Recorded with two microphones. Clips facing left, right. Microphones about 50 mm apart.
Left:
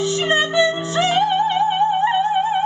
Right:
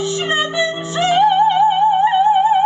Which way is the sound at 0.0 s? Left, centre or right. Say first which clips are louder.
Even; centre.